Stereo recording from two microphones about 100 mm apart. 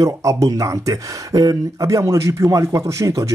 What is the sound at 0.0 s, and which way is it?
Speech, 35° right (ahead or behind).